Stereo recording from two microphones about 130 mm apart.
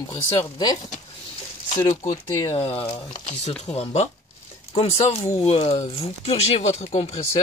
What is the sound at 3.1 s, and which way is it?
Speech, 60° left (ahead or behind).